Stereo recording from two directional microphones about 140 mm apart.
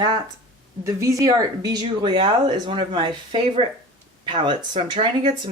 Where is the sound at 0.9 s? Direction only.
20° right (ahead or behind).